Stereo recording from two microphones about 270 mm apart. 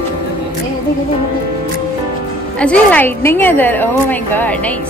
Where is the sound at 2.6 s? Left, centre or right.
Centre.